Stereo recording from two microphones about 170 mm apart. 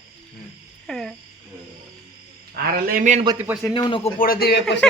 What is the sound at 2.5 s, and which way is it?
Speech, 60° right (ahead or behind).